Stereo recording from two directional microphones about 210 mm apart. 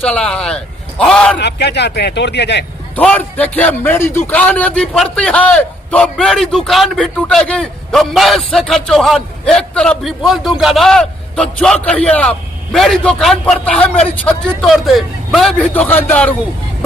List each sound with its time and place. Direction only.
0.0 s a man's voice: 5° left (ahead or behind)
1.4 s speech: 50° left (ahead or behind)
2.9 s a man's voice: 5° left (ahead or behind)